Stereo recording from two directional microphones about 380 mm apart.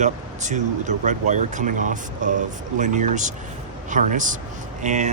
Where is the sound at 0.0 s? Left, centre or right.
Centre.